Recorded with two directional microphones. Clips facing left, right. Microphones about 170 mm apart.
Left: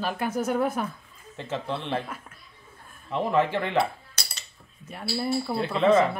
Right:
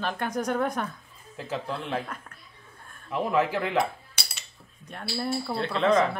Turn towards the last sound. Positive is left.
turn(degrees=5)  # may be behind; listen again after turning